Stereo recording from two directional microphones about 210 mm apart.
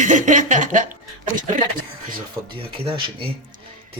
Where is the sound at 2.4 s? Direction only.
15° right (ahead or behind).